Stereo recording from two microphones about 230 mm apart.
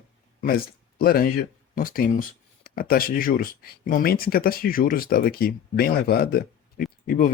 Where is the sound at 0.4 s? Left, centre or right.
Left.